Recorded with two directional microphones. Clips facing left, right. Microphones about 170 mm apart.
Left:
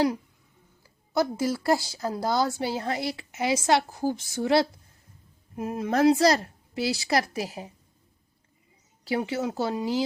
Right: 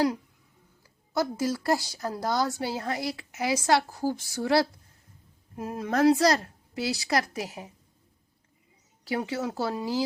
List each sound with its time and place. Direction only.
0.8 s speech: 25° left (ahead or behind)
9.0 s speech: 25° left (ahead or behind)